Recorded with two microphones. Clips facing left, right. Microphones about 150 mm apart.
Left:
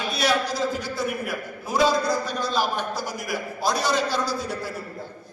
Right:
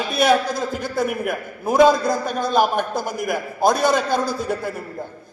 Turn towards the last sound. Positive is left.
turn(degrees=-55)  # may be behind; listen again after turning